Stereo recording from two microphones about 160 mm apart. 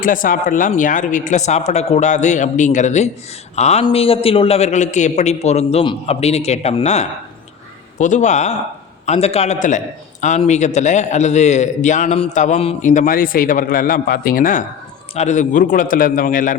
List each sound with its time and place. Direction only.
0.0 s a man's voice: 60° left (ahead or behind)
15.1 s a man's voice: 45° left (ahead or behind)